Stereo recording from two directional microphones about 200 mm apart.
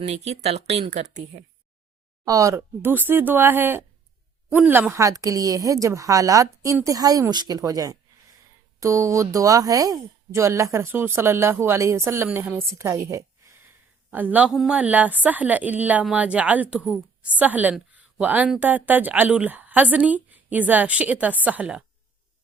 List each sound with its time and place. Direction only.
0.0 s speech: 30° right (ahead or behind)
2.2 s speech: 15° right (ahead or behind)